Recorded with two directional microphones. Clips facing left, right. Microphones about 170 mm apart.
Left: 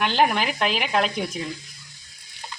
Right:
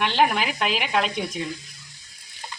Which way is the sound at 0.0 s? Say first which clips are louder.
Even; centre (ahead or behind).